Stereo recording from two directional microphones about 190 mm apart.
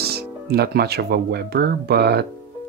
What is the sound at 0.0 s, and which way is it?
Speech, 55° right (ahead or behind).